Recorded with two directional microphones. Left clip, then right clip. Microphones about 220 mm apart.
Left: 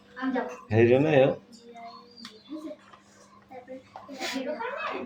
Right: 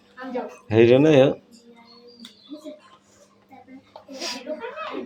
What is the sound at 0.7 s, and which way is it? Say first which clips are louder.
Speech: right 7 dB; 30° right (ahead or behind).